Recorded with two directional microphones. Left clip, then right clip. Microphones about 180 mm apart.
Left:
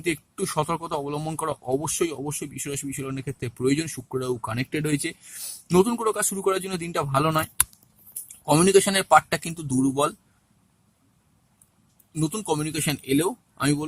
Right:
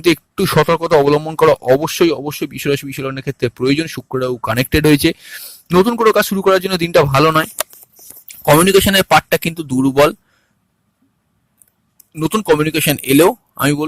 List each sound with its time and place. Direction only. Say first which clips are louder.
0.0 s speech: right 13 dB; 40° right (ahead or behind)
4.4 s speech: right 15 dB; 45° right (ahead or behind)
5.4 s a sound: right 4 dB; 20° right (ahead or behind)
5.7 s speech: right 11 dB; 35° right (ahead or behind)
12.2 s speech: right 13 dB; 35° right (ahead or behind)